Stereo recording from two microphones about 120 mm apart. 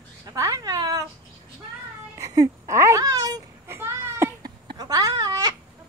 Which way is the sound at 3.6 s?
20° right (ahead or behind).